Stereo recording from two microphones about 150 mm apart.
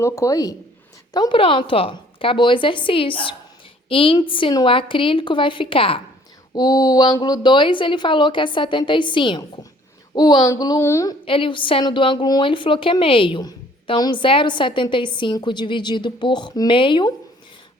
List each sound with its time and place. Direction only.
0.0 s a woman's voice: 20° left (ahead or behind); by 6.0 s 35° left (ahead or behind)
6.5 s a woman's voice: 25° left (ahead or behind)
11.3 s a woman's voice: 35° left (ahead or behind)